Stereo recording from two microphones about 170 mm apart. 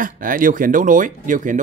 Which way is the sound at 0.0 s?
55° right (ahead or behind).